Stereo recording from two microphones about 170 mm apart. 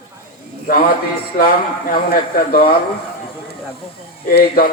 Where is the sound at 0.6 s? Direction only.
65° left (ahead or behind).